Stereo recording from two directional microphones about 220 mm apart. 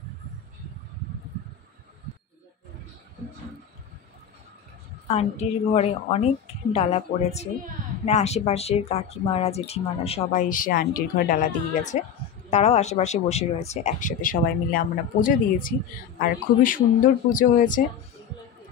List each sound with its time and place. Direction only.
5.0 s a woman's voice: 30° left (ahead or behind)